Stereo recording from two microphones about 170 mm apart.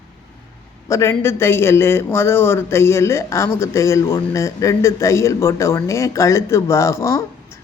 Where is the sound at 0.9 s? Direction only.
15° left (ahead or behind).